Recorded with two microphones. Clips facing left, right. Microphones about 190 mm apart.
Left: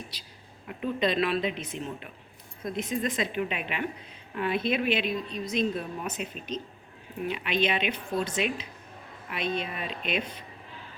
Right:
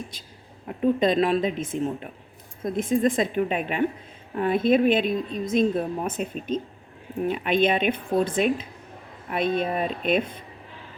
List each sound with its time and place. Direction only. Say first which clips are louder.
0.1 s a woman's voice: right 3 dB; 50° right (ahead or behind)